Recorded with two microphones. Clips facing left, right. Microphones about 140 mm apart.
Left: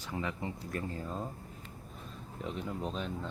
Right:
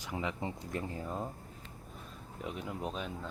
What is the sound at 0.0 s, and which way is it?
Speech, 15° right (ahead or behind).